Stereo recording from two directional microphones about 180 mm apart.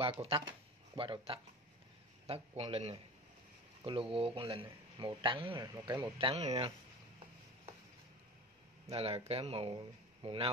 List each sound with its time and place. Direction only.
0.0 s speech: 30° right (ahead or behind)
8.8 s speech: 35° right (ahead or behind)